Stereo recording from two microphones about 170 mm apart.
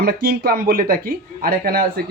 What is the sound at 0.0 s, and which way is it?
Speech, 60° right (ahead or behind).